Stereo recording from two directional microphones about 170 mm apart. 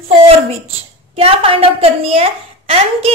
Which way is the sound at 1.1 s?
35° right (ahead or behind).